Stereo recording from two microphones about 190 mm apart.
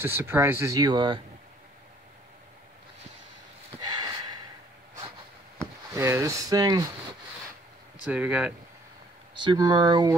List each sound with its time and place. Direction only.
0.0 s speech: 10° right (ahead or behind)
3.8 s a sound: 20° right (ahead or behind)
5.9 s speech: 15° right (ahead or behind)
8.1 s speech: 5° right (ahead or behind)
9.4 s speech: 25° right (ahead or behind)